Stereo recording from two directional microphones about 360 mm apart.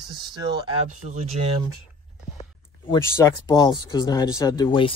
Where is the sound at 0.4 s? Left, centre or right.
Centre.